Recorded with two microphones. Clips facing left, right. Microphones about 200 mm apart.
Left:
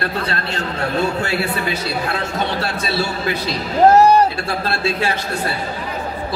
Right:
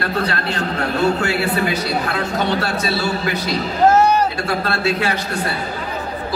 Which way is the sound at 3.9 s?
35° left (ahead or behind).